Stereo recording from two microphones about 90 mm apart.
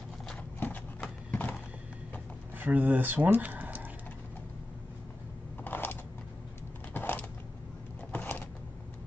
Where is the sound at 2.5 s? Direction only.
20° right (ahead or behind).